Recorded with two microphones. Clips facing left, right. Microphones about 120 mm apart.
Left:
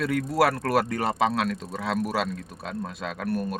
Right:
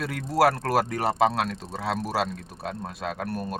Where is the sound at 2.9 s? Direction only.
40° right (ahead or behind).